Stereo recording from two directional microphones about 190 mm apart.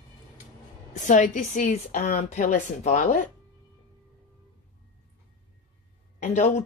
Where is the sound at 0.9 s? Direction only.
40° left (ahead or behind).